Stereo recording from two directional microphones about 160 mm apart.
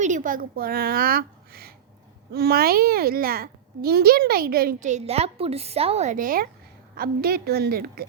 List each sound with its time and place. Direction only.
0.0 s a child's voice: 55° right (ahead or behind); by 4.9 s 70° right (ahead or behind)
4.9 s a woman's voice: 45° right (ahead or behind); by 8.0 s 70° right (ahead or behind)